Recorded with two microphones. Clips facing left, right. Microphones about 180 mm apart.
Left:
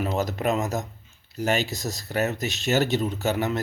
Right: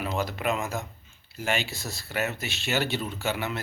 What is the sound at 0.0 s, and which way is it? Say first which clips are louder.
A man's voice: left 4 dB; 40° left (ahead or behind).